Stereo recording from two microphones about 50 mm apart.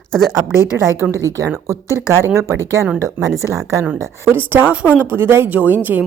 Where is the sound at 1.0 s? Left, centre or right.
Centre.